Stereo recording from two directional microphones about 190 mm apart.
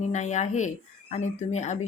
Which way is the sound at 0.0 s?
40° left (ahead or behind).